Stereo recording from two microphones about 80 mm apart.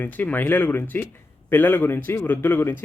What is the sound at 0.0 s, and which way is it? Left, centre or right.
A man's voice, left.